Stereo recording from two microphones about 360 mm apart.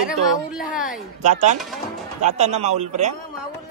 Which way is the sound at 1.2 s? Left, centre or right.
Centre.